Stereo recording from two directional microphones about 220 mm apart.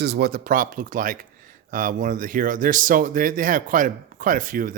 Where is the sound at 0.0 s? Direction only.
45° right (ahead or behind).